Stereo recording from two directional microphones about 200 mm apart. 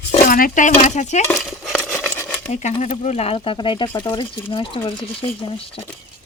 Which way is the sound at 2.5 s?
35° left (ahead or behind).